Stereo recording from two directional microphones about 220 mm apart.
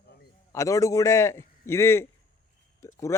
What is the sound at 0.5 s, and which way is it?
A man's voice, 15° left (ahead or behind).